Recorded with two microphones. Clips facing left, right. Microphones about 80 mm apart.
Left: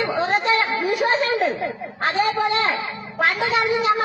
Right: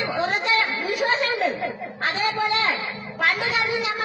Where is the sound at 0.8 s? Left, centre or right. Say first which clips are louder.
Left 3 dB; left.